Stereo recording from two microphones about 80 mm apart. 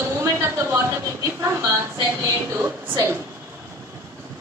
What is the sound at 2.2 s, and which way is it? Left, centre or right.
Speech, right.